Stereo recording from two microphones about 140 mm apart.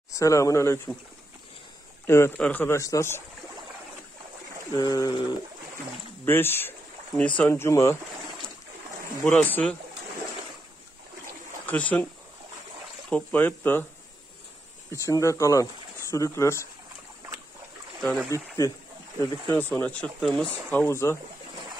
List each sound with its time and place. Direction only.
0.1 s speech: 25° left (ahead or behind)
2.0 s a man's voice: 20° left (ahead or behind)
4.7 s speech: 30° left (ahead or behind)
6.2 s speech: 15° left (ahead or behind)
9.2 s speech: 10° left (ahead or behind)
11.6 s speech: 10° left (ahead or behind)
13.1 s speech: 10° left (ahead or behind)
14.9 s speech: 20° left (ahead or behind)
18.0 s speech: 5° left (ahead or behind)
19.5 s speech: 15° left (ahead or behind)